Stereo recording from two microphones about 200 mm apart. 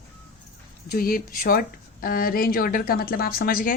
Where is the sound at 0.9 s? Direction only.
45° left (ahead or behind).